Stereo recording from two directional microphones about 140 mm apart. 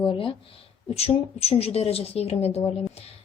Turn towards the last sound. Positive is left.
turn(degrees=45)  # may be behind; listen again after turning